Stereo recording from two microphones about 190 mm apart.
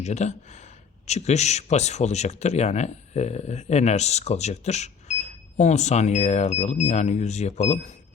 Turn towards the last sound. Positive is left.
turn(degrees=35)  # may be behind; listen again after turning